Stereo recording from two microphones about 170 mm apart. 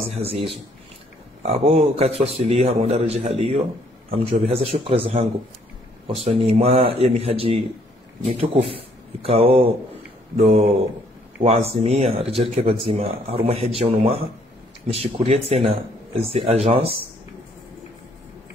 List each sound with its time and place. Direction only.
0.1 s speech: 35° right (ahead or behind)
6.2 s speech: 35° right (ahead or behind)